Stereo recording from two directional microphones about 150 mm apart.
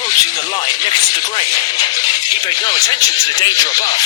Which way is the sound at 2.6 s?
25° left (ahead or behind).